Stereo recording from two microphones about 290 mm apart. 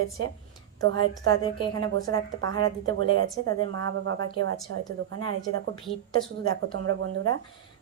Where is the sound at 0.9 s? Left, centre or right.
Centre.